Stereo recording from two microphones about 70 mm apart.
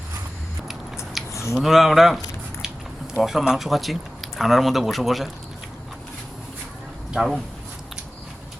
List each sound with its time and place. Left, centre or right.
1.3 s a sound: left
1.5 s speech: centre
7.1 s speech: centre